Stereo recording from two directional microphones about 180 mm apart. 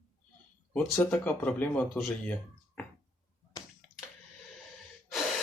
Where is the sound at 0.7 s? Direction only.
10° left (ahead or behind).